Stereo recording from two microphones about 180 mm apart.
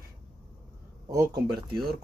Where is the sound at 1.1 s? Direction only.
20° right (ahead or behind).